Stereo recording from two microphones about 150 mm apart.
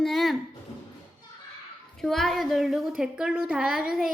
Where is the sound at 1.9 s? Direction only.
Centre (ahead or behind).